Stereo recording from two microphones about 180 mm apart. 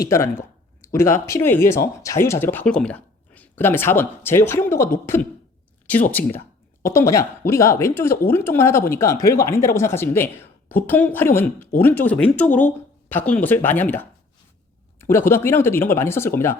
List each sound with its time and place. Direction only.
0.0 s speech: 15° left (ahead or behind)